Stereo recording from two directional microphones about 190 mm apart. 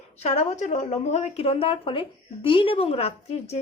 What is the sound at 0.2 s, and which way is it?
A woman's voice, 35° left (ahead or behind).